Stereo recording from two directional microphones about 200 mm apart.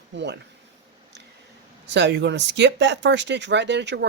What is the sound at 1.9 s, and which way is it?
Speech, 60° right (ahead or behind).